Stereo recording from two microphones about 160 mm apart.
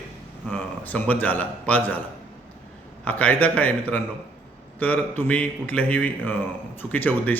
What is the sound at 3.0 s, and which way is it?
A man's voice, 10° left (ahead or behind).